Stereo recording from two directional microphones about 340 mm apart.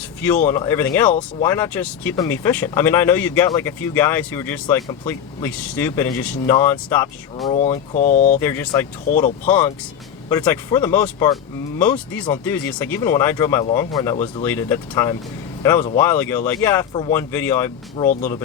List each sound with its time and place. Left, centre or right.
0.4 s speech: centre
7.5 s speech: centre
8.4 s speech: centre